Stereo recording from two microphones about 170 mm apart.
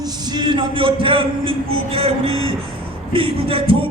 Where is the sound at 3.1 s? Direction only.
35° right (ahead or behind).